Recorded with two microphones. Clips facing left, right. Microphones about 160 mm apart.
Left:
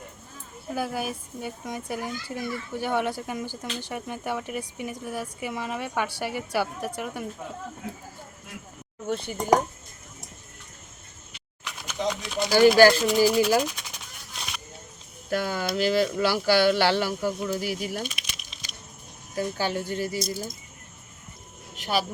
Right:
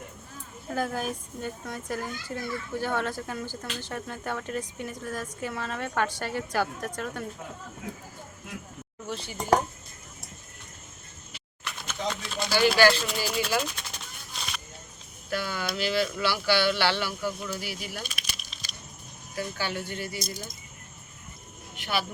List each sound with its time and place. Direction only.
0.7 s speech: 10° left (ahead or behind)
9.0 s speech: 55° left (ahead or behind)
11.6 s a sound: 10° left (ahead or behind)
12.9 s speech: 15° left (ahead or behind)
13.6 s a sound: 15° left (ahead or behind)
15.3 s speech: 45° left (ahead or behind)
18.0 s a sound: 20° left (ahead or behind)
19.4 s speech: 40° left (ahead or behind)
21.8 s speech: 40° left (ahead or behind)